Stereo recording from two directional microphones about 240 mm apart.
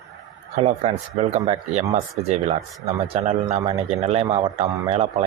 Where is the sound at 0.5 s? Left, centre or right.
Right.